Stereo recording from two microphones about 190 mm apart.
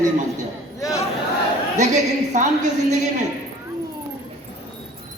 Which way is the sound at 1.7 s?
40° right (ahead or behind).